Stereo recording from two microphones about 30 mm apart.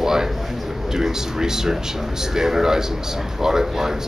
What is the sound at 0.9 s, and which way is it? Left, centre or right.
A man's voice, centre.